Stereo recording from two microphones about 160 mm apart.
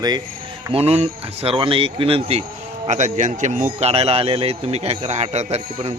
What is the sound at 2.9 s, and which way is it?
A man's voice, 50° right (ahead or behind).